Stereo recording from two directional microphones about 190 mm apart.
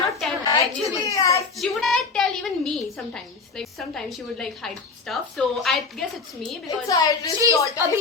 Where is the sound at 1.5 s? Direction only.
Centre (ahead or behind).